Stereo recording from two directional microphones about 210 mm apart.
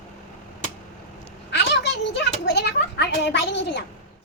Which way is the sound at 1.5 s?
55° left (ahead or behind).